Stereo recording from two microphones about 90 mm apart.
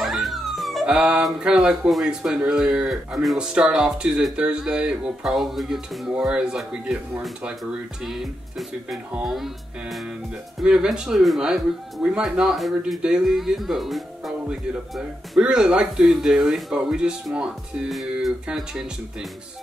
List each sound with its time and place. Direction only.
0.0 s music: centre (ahead or behind)
0.9 s speech: 10° right (ahead or behind)